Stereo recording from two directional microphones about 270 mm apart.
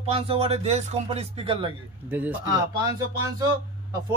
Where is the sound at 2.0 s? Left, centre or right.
Centre.